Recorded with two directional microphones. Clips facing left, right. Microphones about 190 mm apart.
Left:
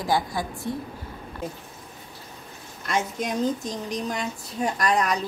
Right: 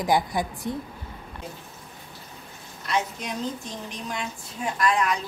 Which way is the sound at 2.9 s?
45° left (ahead or behind).